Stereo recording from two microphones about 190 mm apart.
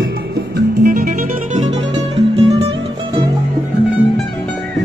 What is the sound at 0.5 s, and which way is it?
Music, 50° right (ahead or behind).